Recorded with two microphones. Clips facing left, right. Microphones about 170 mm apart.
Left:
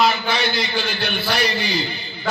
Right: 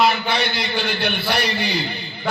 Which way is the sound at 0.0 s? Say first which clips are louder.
Even; 60° right (ahead or behind).